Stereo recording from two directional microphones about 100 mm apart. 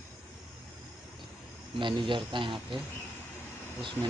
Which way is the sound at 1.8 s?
55° right (ahead or behind).